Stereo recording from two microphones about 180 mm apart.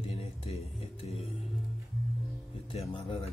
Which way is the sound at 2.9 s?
30° left (ahead or behind).